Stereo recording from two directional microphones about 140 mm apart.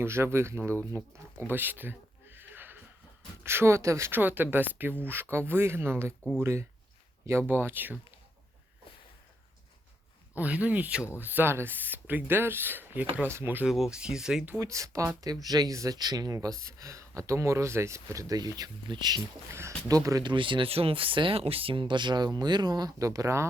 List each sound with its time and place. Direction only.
0.0 s speech: 20° right (ahead or behind)
0.9 s a sound: 15° right (ahead or behind)
3.4 s speech: 20° right (ahead or behind)
10.3 s speech: 10° right (ahead or behind)
13.7 s speech: 5° right (ahead or behind)
14.6 s speech: 20° right (ahead or behind)
19.5 s speech: 20° right (ahead or behind)